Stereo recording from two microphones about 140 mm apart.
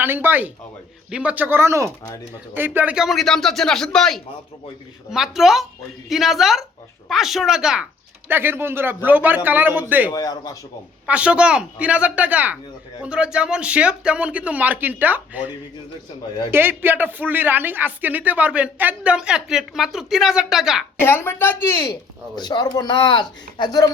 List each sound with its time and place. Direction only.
0.0 s a man's voice: 15° right (ahead or behind)
8.3 s speech: 15° right (ahead or behind)
10.1 s a man's voice: 25° left (ahead or behind)
11.0 s speech: 10° right (ahead or behind)
21.0 s a woman's voice: 15° left (ahead or behind)
22.4 s speech: 30° left (ahead or behind)